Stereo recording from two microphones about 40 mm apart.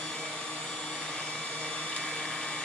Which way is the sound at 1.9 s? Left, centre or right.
Left.